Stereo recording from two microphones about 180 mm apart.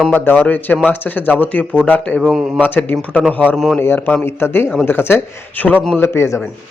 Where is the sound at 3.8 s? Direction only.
10° left (ahead or behind).